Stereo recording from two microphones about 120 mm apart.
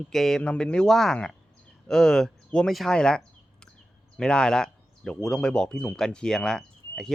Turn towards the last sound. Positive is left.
turn(degrees=5)  # may be behind; listen again after turning